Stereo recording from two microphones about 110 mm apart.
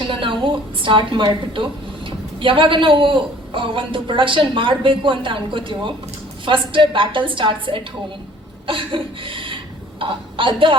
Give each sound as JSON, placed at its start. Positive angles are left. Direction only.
{"t": 0.0, "sound": "a woman's voice", "side_deg": -50}
{"t": 8.6, "sound": "a sound", "side_deg": -50}
{"t": 10.0, "sound": "a woman's voice", "side_deg": -50}